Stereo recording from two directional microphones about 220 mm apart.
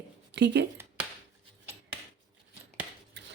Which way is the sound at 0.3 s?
50° right (ahead or behind).